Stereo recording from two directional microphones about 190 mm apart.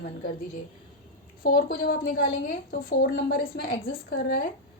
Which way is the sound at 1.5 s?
50° left (ahead or behind).